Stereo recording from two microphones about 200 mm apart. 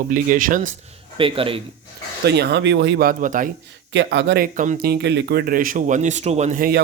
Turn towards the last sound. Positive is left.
turn(degrees=-45)  # may be behind; listen again after turning